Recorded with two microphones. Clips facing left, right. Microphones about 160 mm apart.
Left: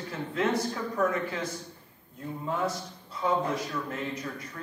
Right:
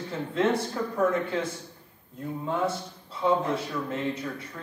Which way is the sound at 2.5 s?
30° right (ahead or behind).